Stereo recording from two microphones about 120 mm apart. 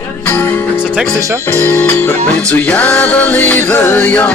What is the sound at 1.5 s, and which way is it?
Music, 15° left (ahead or behind).